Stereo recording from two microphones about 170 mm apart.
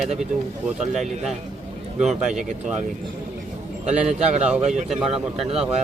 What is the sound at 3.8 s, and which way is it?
Speech, 40° right (ahead or behind).